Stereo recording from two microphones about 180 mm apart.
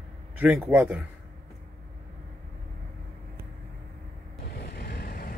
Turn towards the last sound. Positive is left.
turn(degrees=60)  # may be behind; listen again after turning